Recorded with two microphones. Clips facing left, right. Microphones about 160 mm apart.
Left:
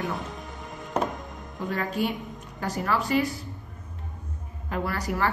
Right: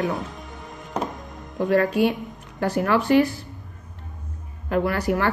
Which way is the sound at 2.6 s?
60° right (ahead or behind).